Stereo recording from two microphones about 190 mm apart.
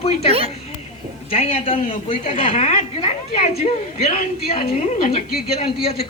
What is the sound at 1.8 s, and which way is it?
Speech, 45° left (ahead or behind).